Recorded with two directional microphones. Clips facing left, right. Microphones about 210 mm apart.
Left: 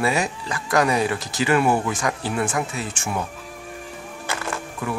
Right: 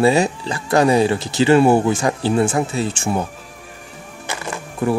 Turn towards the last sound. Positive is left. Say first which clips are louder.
# right 9 dB
turn(degrees=-35)  # may be behind; listen again after turning